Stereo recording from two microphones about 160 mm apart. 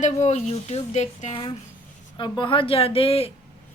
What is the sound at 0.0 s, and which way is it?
A woman's voice, 45° left (ahead or behind).